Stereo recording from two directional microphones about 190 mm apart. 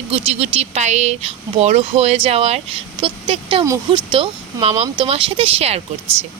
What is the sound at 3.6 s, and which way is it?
Speech, 15° right (ahead or behind).